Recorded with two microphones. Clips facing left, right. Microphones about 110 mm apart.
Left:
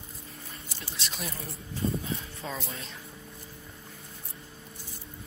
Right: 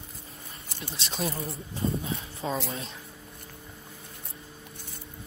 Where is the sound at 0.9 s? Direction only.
30° right (ahead or behind).